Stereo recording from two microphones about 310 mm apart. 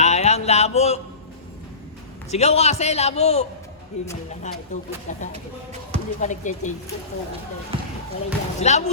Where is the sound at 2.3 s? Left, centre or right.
Left.